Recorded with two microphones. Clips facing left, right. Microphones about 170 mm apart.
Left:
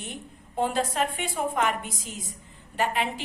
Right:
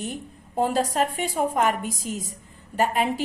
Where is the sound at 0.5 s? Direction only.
40° right (ahead or behind).